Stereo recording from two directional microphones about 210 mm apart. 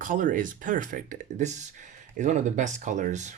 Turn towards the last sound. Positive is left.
turn(degrees=-35)  # may be behind; listen again after turning